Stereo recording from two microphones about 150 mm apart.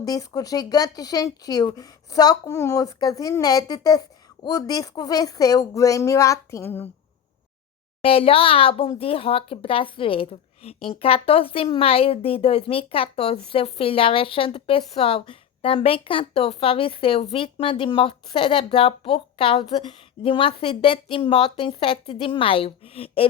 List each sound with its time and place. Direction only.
0.0 s speech: 25° left (ahead or behind)
8.0 s speech: 40° left (ahead or behind)